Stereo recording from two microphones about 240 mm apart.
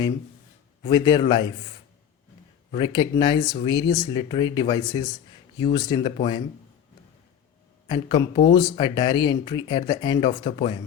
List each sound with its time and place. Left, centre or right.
0.8 s speech: centre
2.7 s speech: centre
7.9 s speech: centre